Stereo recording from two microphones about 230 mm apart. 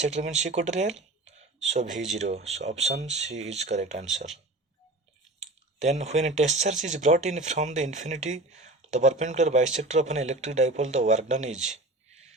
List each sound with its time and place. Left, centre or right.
0.0 s speech: right
5.4 s speech: right